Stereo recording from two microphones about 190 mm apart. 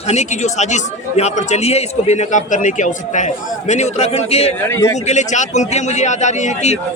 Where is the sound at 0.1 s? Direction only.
40° left (ahead or behind).